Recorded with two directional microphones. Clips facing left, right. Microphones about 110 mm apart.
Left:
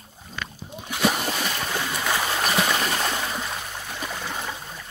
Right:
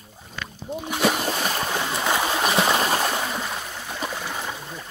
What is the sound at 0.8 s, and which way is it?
Splash, 20° right (ahead or behind).